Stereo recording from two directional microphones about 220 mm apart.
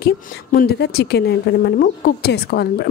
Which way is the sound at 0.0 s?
45° left (ahead or behind).